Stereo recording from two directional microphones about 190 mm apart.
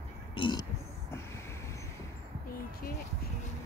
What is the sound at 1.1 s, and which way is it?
Vehicle, 15° left (ahead or behind).